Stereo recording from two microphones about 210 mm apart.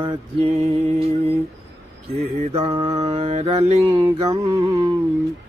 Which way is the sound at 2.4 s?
30° right (ahead or behind).